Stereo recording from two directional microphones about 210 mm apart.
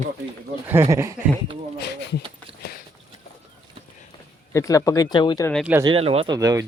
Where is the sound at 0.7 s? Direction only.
15° right (ahead or behind).